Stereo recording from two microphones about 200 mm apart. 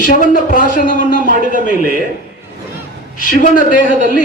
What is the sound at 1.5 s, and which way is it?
Speech, 45° right (ahead or behind).